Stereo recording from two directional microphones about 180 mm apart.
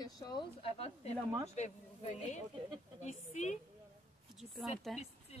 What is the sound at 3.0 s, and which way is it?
Speech, 40° left (ahead or behind).